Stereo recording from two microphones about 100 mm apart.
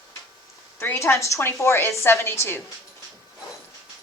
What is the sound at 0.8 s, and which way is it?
A woman's voice, 25° left (ahead or behind).